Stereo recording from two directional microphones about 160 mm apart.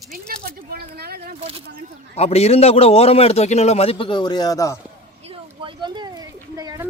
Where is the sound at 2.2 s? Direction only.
40° left (ahead or behind); by 4.7 s 20° left (ahead or behind).